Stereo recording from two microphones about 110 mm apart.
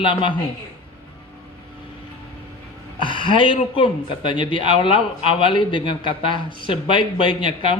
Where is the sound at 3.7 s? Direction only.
50° left (ahead or behind).